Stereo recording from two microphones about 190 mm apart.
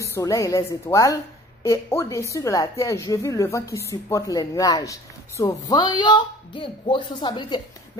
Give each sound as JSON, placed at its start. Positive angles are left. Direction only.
{"t": 0.0, "sound": "a woman's voice", "side_deg": 15}